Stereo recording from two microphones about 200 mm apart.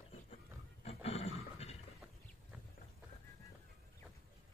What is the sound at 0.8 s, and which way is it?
Roaring cats, 30° left (ahead or behind).